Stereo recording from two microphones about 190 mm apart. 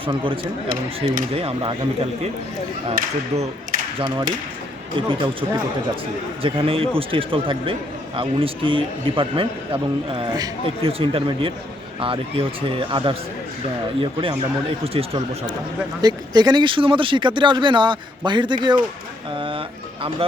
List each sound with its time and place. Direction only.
0.0 s a man's voice: 25° right (ahead or behind)
0.4 s speech: 45° right (ahead or behind)
1.3 s speech: 30° right (ahead or behind)
3.3 s a man's voice: 35° right (ahead or behind)